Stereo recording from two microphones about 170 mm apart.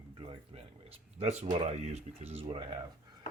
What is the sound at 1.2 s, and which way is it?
Speech, 40° right (ahead or behind).